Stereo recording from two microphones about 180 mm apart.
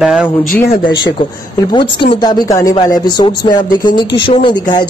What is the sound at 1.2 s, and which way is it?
A man's voice, 30° left (ahead or behind).